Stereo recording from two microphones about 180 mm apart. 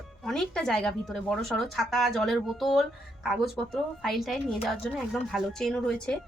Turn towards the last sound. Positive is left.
turn(degrees=5)  # may be behind; listen again after turning